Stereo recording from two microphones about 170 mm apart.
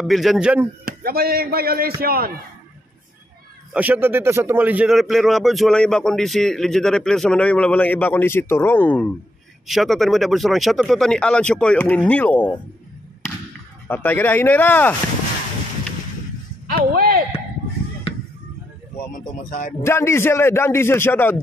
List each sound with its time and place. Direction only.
0.0 s speech: centre (ahead or behind)
0.8 s speech: 60° right (ahead or behind)
3.7 s speech: 10° right (ahead or behind); by 12.5 s 10° left (ahead or behind)
13.8 s a man's voice: 10° left (ahead or behind)
16.6 s a sound: 60° right (ahead or behind)
19.1 s speech: 55° left (ahead or behind)
19.8 s a man's voice: 15° left (ahead or behind)